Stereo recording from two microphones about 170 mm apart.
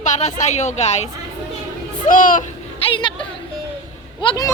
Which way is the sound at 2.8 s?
30° left (ahead or behind).